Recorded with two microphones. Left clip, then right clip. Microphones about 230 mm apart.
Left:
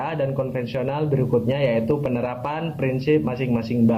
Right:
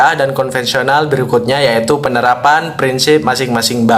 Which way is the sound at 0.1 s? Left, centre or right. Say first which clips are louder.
Right 11 dB; right.